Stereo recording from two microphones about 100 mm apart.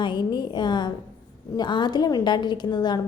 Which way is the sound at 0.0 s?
50° left (ahead or behind).